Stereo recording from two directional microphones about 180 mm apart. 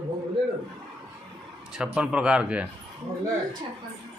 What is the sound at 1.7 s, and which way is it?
Speech, 5° right (ahead or behind).